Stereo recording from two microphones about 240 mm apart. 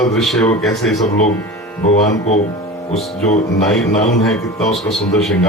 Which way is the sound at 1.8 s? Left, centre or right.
Left.